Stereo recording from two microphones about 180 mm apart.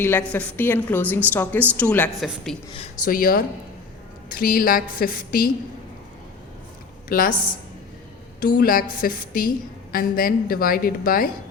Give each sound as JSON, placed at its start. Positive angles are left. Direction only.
{"t": 0.0, "sound": "a woman's voice", "side_deg": 10}
{"t": 2.7, "sound": "speech", "side_deg": 35}
{"t": 3.1, "sound": "a woman's voice", "side_deg": 50}
{"t": 7.1, "sound": "a woman's voice", "side_deg": 55}
{"t": 8.4, "sound": "a woman's voice", "side_deg": 50}